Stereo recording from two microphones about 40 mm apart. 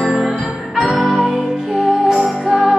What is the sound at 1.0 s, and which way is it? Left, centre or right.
Music, centre.